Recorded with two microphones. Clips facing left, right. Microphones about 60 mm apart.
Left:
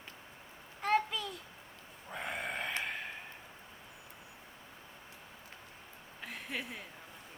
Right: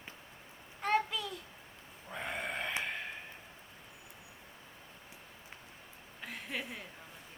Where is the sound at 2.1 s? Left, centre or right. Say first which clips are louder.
Even; centre.